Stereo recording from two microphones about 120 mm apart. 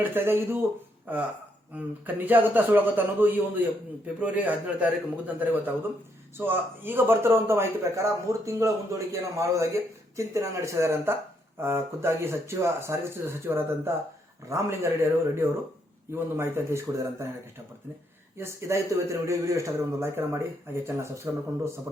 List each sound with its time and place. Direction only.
0.0 s a man's voice: 20° right (ahead or behind)
18.3 s a man's voice: 25° right (ahead or behind)